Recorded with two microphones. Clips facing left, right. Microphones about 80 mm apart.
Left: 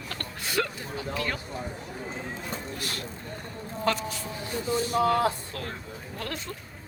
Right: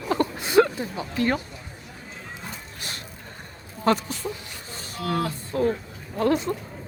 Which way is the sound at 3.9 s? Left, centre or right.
Right.